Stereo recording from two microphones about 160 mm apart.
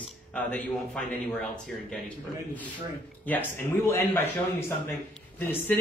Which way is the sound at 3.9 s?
15° left (ahead or behind).